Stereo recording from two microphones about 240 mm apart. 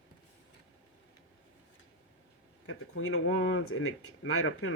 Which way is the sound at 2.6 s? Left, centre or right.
Left.